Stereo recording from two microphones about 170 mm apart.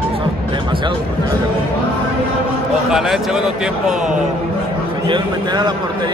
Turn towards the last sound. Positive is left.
turn(degrees=-25)  # may be behind; listen again after turning